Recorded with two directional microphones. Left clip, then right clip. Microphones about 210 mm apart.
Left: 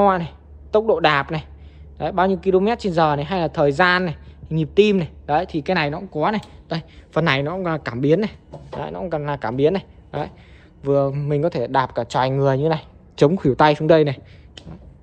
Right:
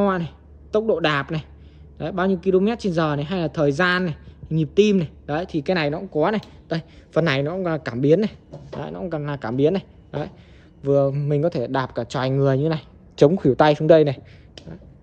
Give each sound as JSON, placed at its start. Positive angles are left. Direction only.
{"t": 0.0, "sound": "a woman's voice", "side_deg": -10}
{"t": 9.1, "sound": "a woman's voice", "side_deg": -10}
{"t": 13.1, "sound": "speech", "side_deg": -20}